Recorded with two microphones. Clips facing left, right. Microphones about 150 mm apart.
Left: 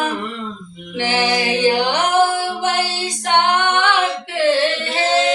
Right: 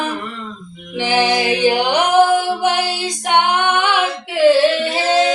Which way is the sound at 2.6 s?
15° right (ahead or behind).